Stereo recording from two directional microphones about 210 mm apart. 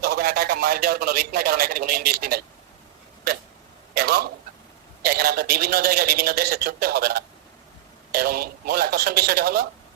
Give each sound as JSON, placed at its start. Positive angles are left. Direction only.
{"t": 0.0, "sound": "a man's voice", "side_deg": -45}
{"t": 3.9, "sound": "a sound", "side_deg": -50}
{"t": 5.0, "sound": "a man's voice", "side_deg": -45}